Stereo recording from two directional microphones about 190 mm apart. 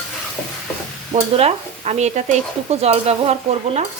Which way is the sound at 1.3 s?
35° right (ahead or behind).